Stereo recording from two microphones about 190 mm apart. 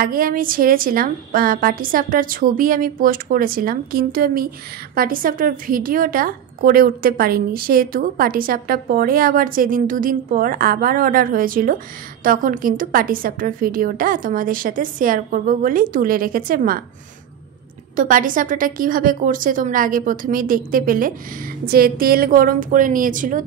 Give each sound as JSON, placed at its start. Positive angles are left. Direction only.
{"t": 0.0, "sound": "a woman's voice", "side_deg": -50}
{"t": 17.9, "sound": "a woman's voice", "side_deg": -45}